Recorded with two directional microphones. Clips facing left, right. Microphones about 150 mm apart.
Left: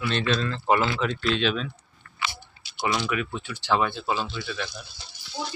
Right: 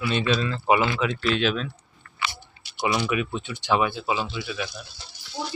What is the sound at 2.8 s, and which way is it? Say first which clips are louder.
Speech: right 2 dB; 10° right (ahead or behind).